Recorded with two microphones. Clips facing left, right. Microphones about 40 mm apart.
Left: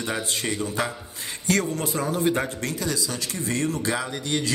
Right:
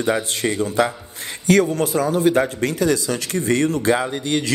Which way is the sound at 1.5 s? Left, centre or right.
Right.